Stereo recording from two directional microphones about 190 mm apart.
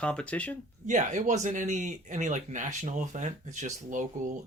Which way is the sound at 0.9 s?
40° right (ahead or behind).